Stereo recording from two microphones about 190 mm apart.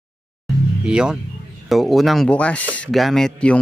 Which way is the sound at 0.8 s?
5° right (ahead or behind).